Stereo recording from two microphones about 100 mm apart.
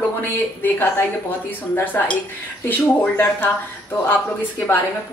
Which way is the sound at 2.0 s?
20° left (ahead or behind).